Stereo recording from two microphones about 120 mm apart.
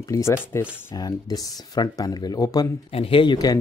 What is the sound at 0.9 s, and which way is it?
Speech, 30° left (ahead or behind).